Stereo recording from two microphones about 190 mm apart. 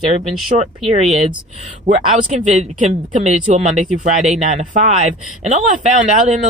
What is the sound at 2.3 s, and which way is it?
Speech, 35° right (ahead or behind).